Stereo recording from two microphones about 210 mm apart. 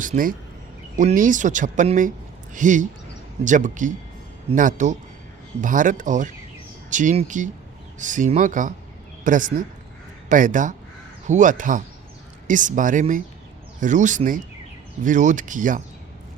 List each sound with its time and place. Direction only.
0.0 s speech: 40° right (ahead or behind)